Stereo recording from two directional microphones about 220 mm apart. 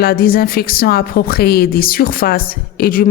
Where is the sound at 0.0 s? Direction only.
45° left (ahead or behind).